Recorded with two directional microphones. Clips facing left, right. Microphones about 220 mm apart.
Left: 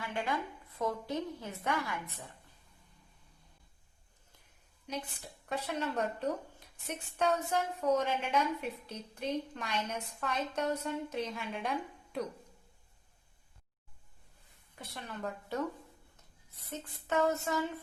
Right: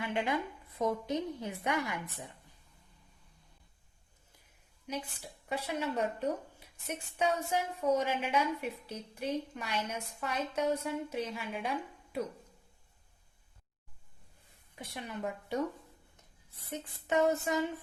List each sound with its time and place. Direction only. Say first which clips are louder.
0.0 s a woman's voice: right 3 dB; 20° right (ahead or behind)
4.9 s a woman's voice: right 1 dB; 10° right (ahead or behind)
14.8 s a woman's voice: right 2 dB; 15° right (ahead or behind)
16.7 s a woman's voice: right 2 dB; 15° right (ahead or behind)